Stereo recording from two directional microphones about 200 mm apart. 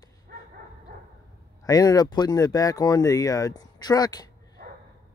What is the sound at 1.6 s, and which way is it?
Speech, 20° left (ahead or behind).